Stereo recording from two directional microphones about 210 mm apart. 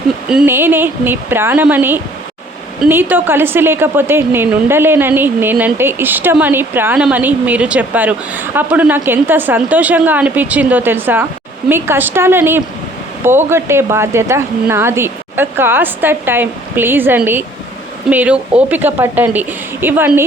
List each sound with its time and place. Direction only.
0.3 s a woman's voice: 5° right (ahead or behind)